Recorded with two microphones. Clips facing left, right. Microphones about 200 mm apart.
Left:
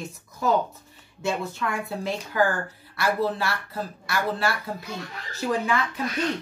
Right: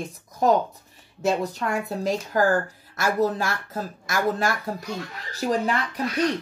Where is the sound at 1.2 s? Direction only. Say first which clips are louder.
Right 4 dB; 40° right (ahead or behind).